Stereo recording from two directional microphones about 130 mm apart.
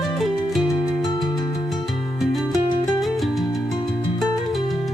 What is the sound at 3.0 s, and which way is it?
Music, centre (ahead or behind).